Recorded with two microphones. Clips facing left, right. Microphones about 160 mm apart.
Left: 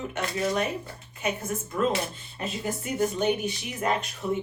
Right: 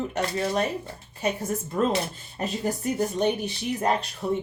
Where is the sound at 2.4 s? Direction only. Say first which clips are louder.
Right 4 dB; 40° right (ahead or behind).